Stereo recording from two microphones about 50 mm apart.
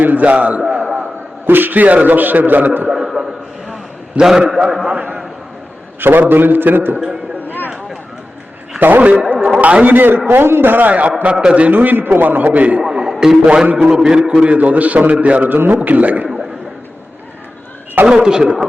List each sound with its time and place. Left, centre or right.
0.0 s a man's voice: right
0.6 s a sound: right
1.5 s a man's voice: right
2.9 s a sound: centre
4.2 s a man's voice: centre
6.0 s a man's voice: right
9.0 s a man's voice: right
11.2 s a man's voice: centre
11.7 s a man's voice: right
12.9 s a man's voice: centre
14.3 s a man's voice: right
15.4 s a man's voice: right
16.2 s a sound: centre
18.0 s a man's voice: centre